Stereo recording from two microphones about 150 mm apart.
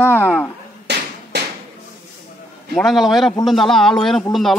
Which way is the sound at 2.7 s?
Centre (ahead or behind).